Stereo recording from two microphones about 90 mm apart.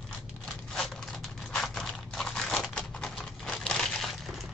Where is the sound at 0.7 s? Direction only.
5° left (ahead or behind).